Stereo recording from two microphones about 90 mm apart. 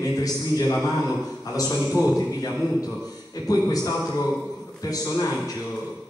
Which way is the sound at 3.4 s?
40° left (ahead or behind).